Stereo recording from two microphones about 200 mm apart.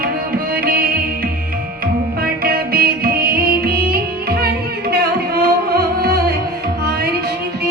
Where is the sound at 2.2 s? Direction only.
50° right (ahead or behind).